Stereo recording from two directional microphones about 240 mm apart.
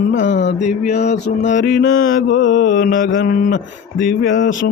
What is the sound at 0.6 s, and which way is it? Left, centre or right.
Mantra, left.